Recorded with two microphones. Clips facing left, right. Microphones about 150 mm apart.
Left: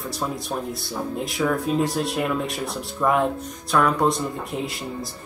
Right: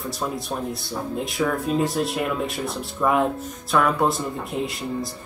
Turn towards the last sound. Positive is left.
turn(degrees=0)  # may be behind; listen again after turning